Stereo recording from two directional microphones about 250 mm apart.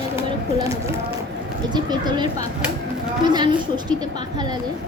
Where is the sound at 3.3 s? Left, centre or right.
Centre.